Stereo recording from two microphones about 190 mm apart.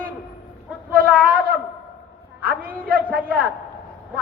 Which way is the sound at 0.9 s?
50° right (ahead or behind).